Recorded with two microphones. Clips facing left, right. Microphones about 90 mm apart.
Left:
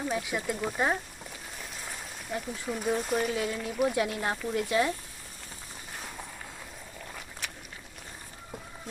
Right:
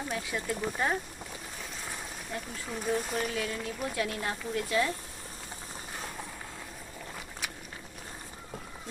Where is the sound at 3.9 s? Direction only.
25° left (ahead or behind).